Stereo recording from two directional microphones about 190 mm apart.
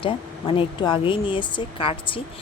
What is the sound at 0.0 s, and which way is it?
Speech, 25° left (ahead or behind).